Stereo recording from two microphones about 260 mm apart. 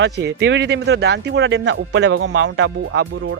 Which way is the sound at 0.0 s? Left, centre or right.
Right.